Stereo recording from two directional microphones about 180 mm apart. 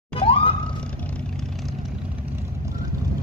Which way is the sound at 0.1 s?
30° left (ahead or behind).